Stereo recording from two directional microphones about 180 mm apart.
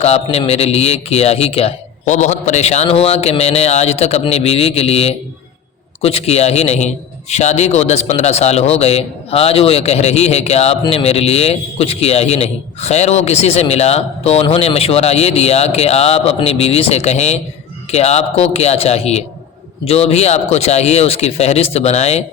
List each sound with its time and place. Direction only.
0.0 s a man's voice: 35° left (ahead or behind)